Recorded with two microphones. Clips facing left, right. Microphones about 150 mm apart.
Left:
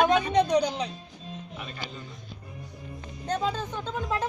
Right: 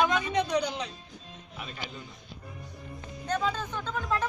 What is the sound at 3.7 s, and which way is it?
Speech, 20° left (ahead or behind).